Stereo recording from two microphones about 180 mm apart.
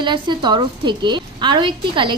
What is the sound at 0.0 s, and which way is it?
A woman's voice, 25° right (ahead or behind).